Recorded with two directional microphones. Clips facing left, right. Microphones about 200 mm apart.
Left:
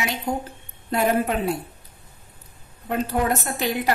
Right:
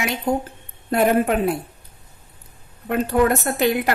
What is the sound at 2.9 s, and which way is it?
Speech, 60° right (ahead or behind).